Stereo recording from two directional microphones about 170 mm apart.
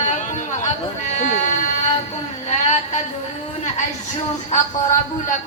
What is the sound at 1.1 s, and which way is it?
Buzzer, 45° left (ahead or behind).